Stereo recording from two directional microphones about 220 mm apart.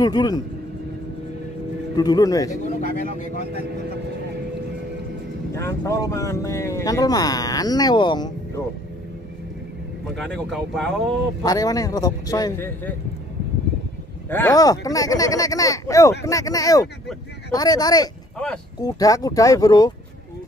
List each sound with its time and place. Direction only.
0.0 s speech: 20° left (ahead or behind)
2.0 s speech: 15° left (ahead or behind)
2.8 s vehicle: 35° left (ahead or behind)
5.5 s speech: 15° left (ahead or behind)
10.1 s speech: centre (ahead or behind)
11.4 s speech: 15° left (ahead or behind)
14.3 s speech: 15° left (ahead or behind)